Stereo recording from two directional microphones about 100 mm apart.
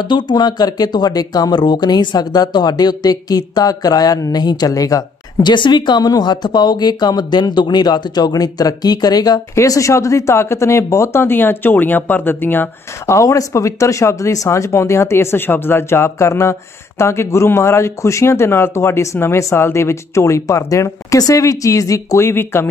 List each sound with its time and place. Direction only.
0.0 s speech: 50° left (ahead or behind); by 22.7 s 25° left (ahead or behind)